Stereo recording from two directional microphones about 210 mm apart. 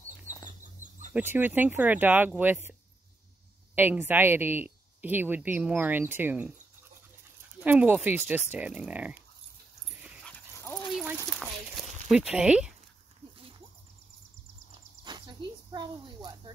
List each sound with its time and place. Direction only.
1.1 s speech: 10° right (ahead or behind)
3.7 s speech: 10° right (ahead or behind)
7.6 s speech: 10° right (ahead or behind)
10.0 s dog: 5° left (ahead or behind)
10.9 s a sound: centre (ahead or behind)
15.0 s a sound: 20° right (ahead or behind)